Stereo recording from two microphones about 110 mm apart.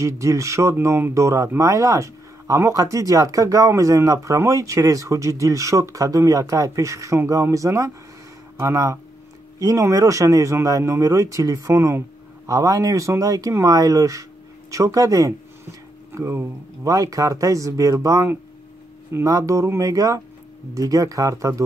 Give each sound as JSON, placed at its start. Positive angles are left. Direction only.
{"t": 0.0, "sound": "speech", "side_deg": -30}